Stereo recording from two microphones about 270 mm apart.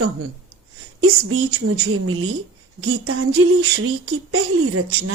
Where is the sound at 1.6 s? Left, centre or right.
Right.